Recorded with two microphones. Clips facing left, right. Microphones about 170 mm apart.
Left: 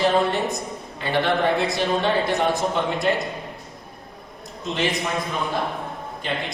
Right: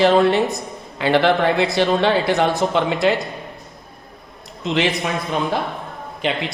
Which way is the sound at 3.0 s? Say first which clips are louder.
Right 5 dB; 90° right.